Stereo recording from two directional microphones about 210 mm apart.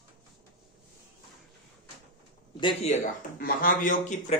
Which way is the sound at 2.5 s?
25° left (ahead or behind).